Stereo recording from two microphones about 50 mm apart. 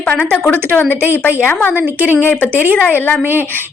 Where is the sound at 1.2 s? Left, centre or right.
Left.